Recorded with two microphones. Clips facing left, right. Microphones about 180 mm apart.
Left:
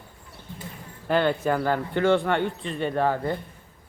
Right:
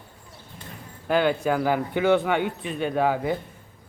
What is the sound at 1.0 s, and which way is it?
A man's voice, 5° right (ahead or behind).